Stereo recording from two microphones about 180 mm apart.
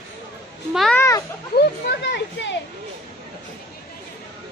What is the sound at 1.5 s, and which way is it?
Speech, 70° left (ahead or behind).